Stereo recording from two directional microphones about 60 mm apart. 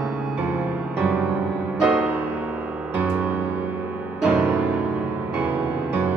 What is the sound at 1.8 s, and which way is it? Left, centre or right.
Music, right.